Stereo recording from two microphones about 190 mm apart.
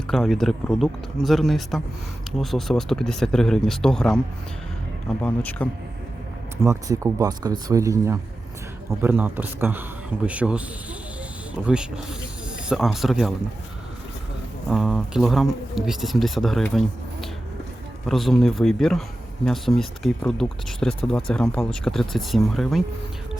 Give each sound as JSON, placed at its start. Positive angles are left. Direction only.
{"t": 0.1, "sound": "speech", "side_deg": 0}
{"t": 5.2, "sound": "speech", "side_deg": 10}
{"t": 6.6, "sound": "speech", "side_deg": -15}
{"t": 11.6, "sound": "speech", "side_deg": -5}
{"t": 14.7, "sound": "speech", "side_deg": 0}